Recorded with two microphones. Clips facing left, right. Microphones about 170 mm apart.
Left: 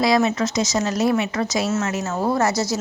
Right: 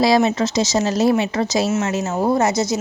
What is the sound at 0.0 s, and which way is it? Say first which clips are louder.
A woman's voice: right 3 dB; 30° right (ahead or behind).